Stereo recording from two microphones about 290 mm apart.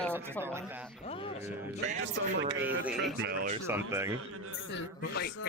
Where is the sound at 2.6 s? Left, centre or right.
Centre.